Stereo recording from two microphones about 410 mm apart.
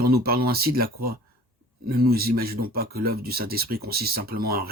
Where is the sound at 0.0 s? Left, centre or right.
Right.